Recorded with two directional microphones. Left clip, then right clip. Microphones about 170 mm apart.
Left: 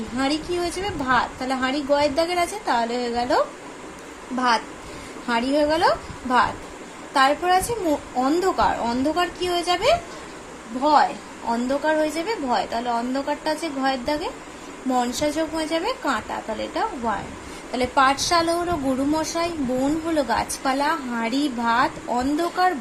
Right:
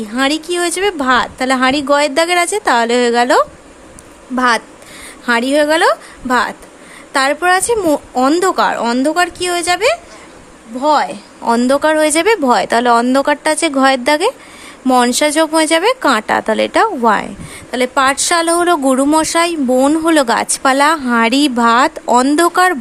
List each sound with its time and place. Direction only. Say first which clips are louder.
0.2 s a woman's voice: right 9 dB; 50° right (ahead or behind); by 17.2 s 70° right (ahead or behind)
17.7 s a woman's voice: right 6 dB; 50° right (ahead or behind)